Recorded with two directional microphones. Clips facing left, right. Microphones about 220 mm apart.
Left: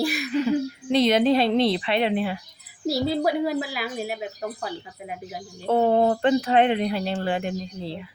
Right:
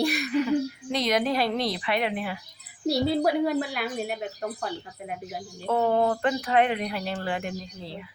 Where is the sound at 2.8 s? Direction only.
Centre (ahead or behind).